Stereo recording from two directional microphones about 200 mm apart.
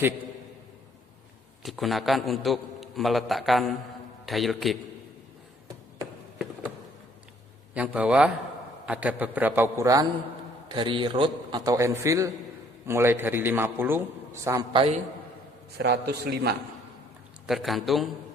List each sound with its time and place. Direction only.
1.6 s a man's voice: centre (ahead or behind)
7.7 s a man's voice: 5° right (ahead or behind); by 14.9 s 25° right (ahead or behind)
15.8 s a man's voice: 55° right (ahead or behind)
17.4 s a man's voice: centre (ahead or behind)